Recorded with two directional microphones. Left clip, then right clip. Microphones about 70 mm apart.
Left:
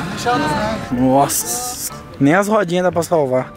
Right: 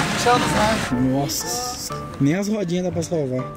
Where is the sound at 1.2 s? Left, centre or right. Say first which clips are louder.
Left 7 dB; left.